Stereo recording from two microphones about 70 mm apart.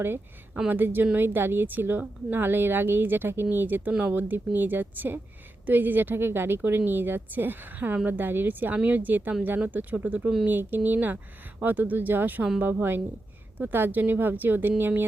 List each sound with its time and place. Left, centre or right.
0.7 s a woman's voice: right